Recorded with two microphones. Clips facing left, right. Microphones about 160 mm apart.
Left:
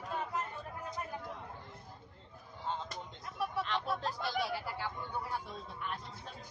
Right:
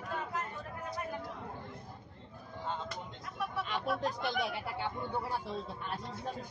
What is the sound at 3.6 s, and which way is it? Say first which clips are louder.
Speech: right 2 dB; 10° right (ahead or behind).